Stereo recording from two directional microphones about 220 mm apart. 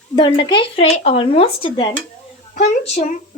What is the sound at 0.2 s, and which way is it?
Speech, 20° left (ahead or behind).